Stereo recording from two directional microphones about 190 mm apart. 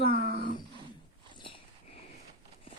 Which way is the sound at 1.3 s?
25° left (ahead or behind).